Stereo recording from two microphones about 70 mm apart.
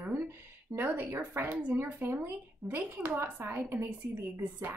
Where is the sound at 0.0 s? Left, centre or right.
Right.